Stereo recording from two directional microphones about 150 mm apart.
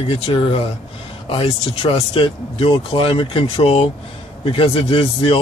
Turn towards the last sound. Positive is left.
turn(degrees=40)  # may be behind; listen again after turning